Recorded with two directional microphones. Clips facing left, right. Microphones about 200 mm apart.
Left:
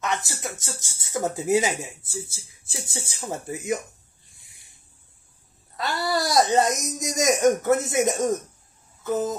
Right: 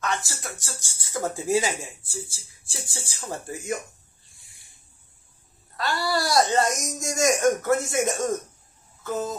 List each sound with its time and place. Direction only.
0.0 s speech: 20° left (ahead or behind)
5.8 s speech: 20° left (ahead or behind)